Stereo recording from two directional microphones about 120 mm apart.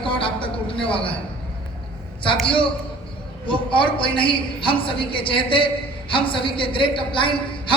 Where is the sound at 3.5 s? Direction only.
45° left (ahead or behind).